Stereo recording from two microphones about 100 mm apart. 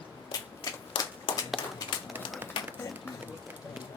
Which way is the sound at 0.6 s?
40° left (ahead or behind).